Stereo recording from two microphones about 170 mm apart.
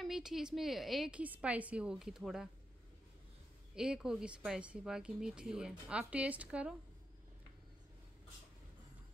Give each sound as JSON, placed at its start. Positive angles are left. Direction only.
{"t": 0.0, "sound": "speech", "side_deg": 0}
{"t": 3.7, "sound": "speech", "side_deg": -5}